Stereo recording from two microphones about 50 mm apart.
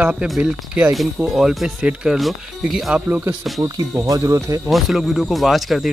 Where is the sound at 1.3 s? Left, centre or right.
Centre.